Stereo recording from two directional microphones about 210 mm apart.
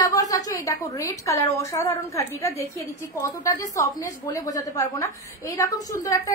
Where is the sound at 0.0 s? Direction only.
15° left (ahead or behind).